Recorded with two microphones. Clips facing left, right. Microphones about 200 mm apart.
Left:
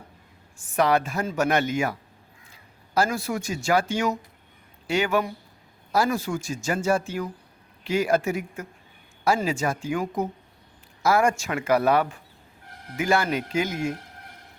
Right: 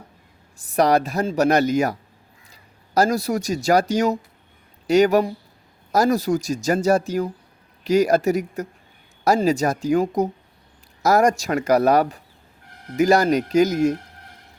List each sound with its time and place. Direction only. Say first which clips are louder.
0.6 s speech: right 4 dB; 40° right (ahead or behind)